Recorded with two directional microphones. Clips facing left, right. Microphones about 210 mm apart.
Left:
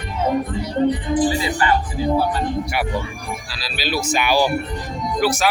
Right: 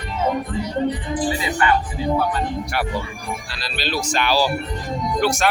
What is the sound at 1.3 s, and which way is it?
Speech, 30° left (ahead or behind).